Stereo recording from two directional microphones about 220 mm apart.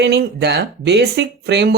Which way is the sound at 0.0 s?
50° right (ahead or behind).